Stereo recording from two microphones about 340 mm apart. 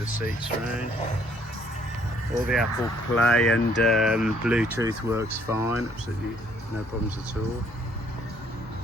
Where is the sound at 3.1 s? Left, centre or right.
Centre.